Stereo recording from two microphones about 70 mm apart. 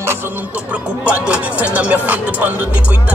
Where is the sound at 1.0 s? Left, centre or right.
Centre.